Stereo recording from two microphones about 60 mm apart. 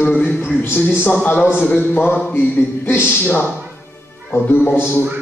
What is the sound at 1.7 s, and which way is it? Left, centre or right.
A man's voice, left.